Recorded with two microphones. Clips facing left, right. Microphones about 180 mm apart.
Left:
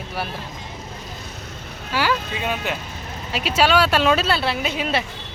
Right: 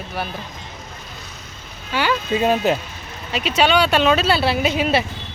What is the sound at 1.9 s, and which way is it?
Speech, 5° left (ahead or behind).